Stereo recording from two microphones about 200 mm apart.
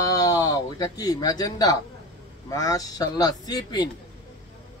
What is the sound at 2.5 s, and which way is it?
A man's voice, 15° left (ahead or behind).